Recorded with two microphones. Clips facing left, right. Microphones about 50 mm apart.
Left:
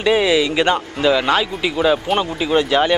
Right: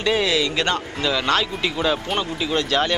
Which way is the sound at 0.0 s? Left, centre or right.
Centre.